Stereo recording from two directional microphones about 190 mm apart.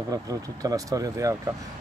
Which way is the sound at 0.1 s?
20° right (ahead or behind).